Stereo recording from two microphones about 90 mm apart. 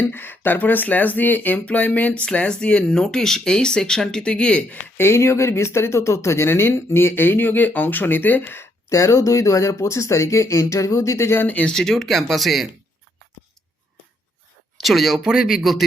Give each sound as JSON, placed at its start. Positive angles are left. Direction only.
{"t": 0.0, "sound": "speech", "side_deg": 25}
{"t": 4.9, "sound": "speech", "side_deg": 30}
{"t": 11.4, "sound": "speech", "side_deg": 15}
{"t": 11.7, "sound": "speech", "side_deg": 5}
{"t": 14.8, "sound": "speech", "side_deg": 0}